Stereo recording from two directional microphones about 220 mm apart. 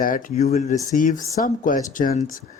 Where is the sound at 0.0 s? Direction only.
40° left (ahead or behind).